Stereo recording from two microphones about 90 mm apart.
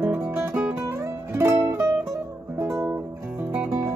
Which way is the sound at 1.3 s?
25° right (ahead or behind).